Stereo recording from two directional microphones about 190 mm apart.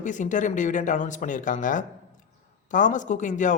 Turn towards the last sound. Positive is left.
turn(degrees=40)  # may be behind; listen again after turning